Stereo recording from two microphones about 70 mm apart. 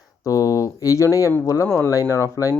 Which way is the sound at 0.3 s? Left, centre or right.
Left.